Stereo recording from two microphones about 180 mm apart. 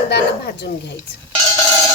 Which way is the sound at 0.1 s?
65° left (ahead or behind).